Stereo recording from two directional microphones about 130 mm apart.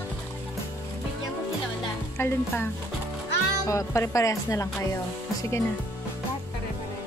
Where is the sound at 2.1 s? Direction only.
15° left (ahead or behind).